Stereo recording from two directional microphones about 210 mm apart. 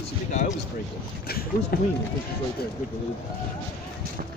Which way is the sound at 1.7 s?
45° left (ahead or behind).